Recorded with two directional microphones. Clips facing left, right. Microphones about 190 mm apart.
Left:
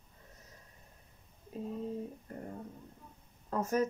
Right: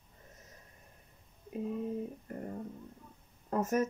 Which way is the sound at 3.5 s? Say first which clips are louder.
Right 1 dB; 20° right (ahead or behind).